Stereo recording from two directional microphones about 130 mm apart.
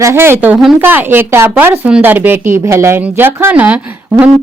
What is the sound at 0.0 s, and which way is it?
A woman's voice, 20° right (ahead or behind).